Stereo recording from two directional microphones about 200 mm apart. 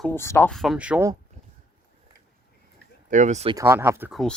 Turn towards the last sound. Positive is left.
turn(degrees=-10)  # may be behind; listen again after turning